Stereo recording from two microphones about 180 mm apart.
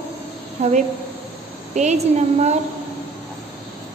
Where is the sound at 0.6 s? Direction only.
35° right (ahead or behind).